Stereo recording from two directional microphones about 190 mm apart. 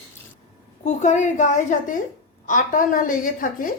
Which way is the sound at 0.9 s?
40° left (ahead or behind).